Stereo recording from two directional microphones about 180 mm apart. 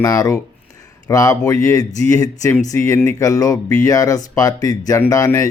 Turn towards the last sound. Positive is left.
turn(degrees=15)  # may be behind; listen again after turning